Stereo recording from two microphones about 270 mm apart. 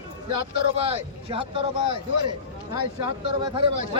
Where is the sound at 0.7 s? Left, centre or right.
Right.